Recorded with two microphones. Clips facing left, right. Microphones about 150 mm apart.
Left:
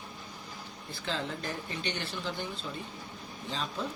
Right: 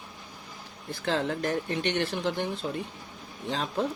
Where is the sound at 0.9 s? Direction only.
80° right.